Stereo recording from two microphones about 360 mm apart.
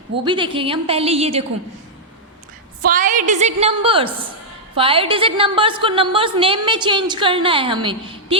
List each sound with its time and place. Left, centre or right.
0.3 s a woman's voice: centre
2.8 s a woman's voice: right